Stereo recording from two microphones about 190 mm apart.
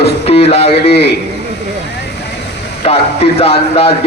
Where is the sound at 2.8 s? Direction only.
30° left (ahead or behind).